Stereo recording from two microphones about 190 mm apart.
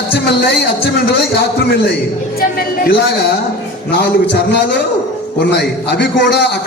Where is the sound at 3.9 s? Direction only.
60° left (ahead or behind).